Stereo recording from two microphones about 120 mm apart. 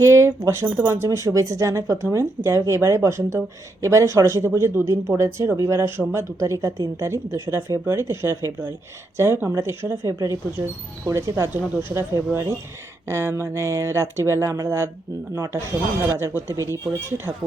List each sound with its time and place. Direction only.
0.0 s speech: 25° right (ahead or behind)